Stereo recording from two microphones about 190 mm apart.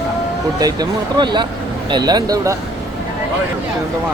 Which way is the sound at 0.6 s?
20° right (ahead or behind).